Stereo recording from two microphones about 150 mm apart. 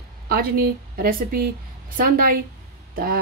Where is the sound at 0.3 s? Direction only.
85° right.